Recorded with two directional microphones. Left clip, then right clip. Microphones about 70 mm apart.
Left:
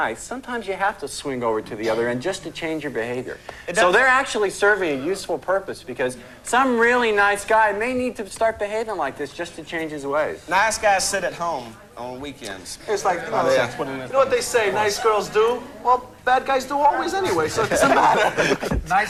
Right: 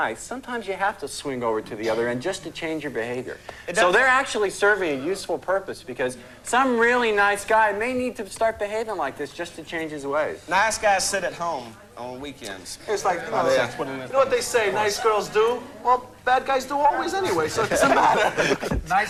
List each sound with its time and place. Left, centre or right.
0.3 s a woman's voice: right
1.3 s speech: right
1.8 s a woman's voice: centre
6.1 s a woman's voice: centre